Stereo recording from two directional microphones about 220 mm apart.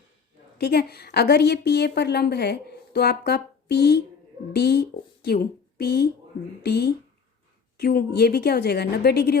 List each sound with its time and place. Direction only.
0.6 s a woman's voice: 45° left (ahead or behind)